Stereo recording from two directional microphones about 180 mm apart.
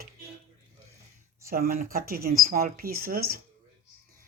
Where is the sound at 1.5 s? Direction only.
50° right (ahead or behind).